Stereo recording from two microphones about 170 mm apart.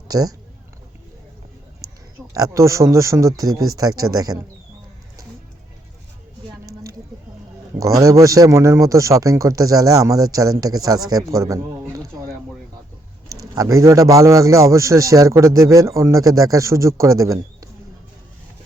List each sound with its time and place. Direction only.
0.1 s a man's voice: 20° right (ahead or behind)
2.3 s a man's voice: 20° right (ahead or behind)
7.8 s a man's voice: 20° right (ahead or behind)
13.6 s a man's voice: 20° right (ahead or behind)